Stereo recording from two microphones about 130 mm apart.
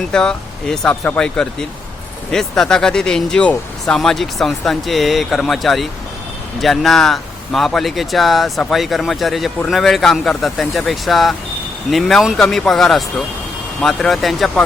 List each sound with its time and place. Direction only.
0.1 s speech: 5° left (ahead or behind)